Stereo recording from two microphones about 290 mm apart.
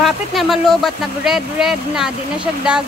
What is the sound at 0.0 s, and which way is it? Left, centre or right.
Speech, centre.